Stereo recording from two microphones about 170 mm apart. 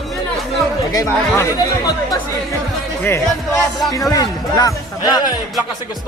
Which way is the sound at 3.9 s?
20° left (ahead or behind).